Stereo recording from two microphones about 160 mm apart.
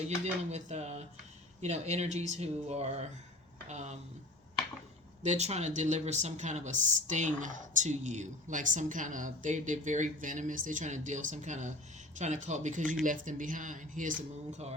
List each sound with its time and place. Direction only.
0.5 s speech: 45° right (ahead or behind)
5.2 s speech: 45° right (ahead or behind)